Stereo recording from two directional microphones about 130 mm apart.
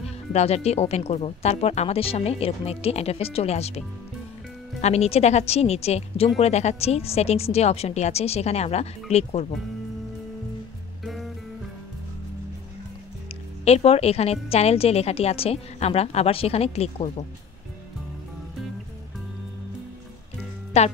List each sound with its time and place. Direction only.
0.3 s a woman's voice: 55° left (ahead or behind)
4.8 s a woman's voice: 55° left (ahead or behind)
13.7 s a woman's voice: 50° left (ahead or behind)
20.7 s a woman's voice: 55° left (ahead or behind)